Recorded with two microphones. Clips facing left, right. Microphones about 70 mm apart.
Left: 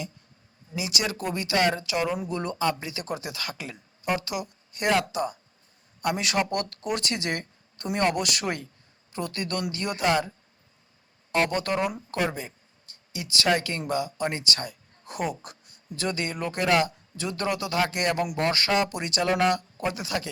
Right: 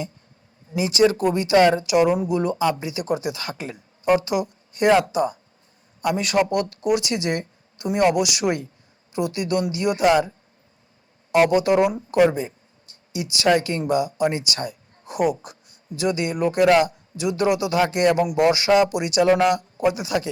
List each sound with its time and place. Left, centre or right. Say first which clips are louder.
0.8 s speech: right 12 dB; right
2.3 s speech: right 7 dB; centre
2.6 s speech: right 6 dB; centre; by 3.8 s right
4.0 s speech: right 9 dB; right
6.0 s a man's voice: right 6 dB; centre; by 20.3 s right